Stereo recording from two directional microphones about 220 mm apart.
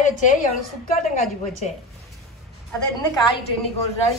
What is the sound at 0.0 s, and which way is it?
Speech, 35° left (ahead or behind).